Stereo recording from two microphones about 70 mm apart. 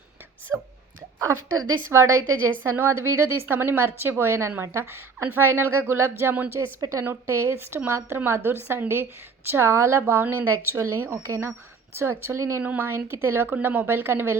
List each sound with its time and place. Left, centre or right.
0.5 s speech: right
1.9 s a woman's voice: right
2.7 s a woman's voice: right
6.7 s a woman's voice: right
7.0 s a woman's voice: right
12.6 s a woman's voice: right